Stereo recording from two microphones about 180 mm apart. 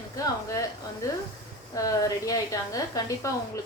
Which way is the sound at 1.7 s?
20° left (ahead or behind).